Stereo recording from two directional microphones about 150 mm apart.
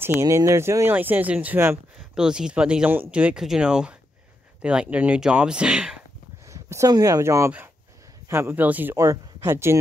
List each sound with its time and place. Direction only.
0.0 s speech: 20° right (ahead or behind)
6.5 s speech: 20° right (ahead or behind)
8.9 s speech: 20° right (ahead or behind)